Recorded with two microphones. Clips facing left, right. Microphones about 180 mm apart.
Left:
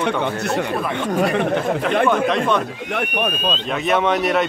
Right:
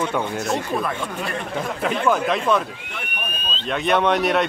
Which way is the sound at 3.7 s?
Centre (ahead or behind).